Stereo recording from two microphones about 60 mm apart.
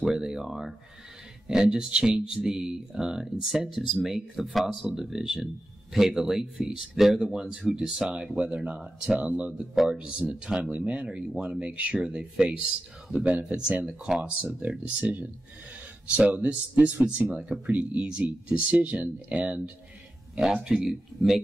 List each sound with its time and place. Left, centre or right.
0.0 s speech: centre
20.5 s speech: centre